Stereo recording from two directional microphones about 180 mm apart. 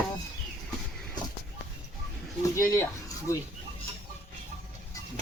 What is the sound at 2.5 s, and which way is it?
Speech, 15° left (ahead or behind).